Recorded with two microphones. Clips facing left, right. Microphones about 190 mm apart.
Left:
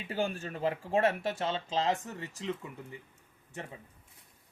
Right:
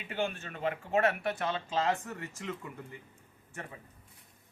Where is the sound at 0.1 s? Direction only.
35° left (ahead or behind); by 2.3 s 20° left (ahead or behind).